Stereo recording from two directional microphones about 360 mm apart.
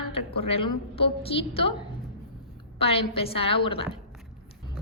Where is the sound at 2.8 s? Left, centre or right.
Centre.